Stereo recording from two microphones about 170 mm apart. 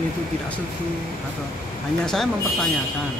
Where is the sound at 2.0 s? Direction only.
Centre (ahead or behind).